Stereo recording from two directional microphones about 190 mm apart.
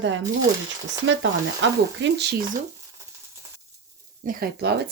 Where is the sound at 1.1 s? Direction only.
70° right (ahead or behind).